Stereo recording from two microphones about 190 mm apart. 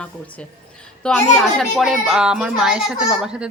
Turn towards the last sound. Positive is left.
turn(degrees=-5)  # may be behind; listen again after turning